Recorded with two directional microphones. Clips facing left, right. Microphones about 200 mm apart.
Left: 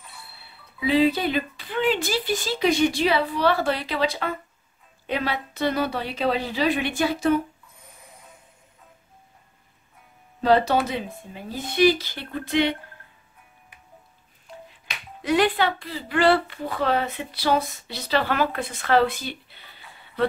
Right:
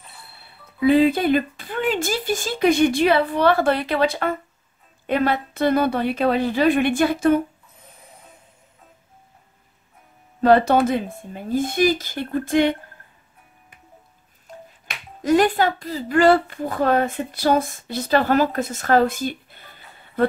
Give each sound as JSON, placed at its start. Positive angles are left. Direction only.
{"t": 0.7, "sound": "speech", "side_deg": -50}
{"t": 10.4, "sound": "speech", "side_deg": -50}
{"t": 15.2, "sound": "speech", "side_deg": -45}